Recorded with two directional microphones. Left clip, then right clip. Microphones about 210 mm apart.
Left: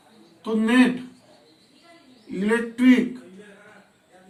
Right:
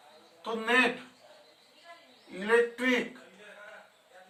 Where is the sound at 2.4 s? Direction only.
5° right (ahead or behind).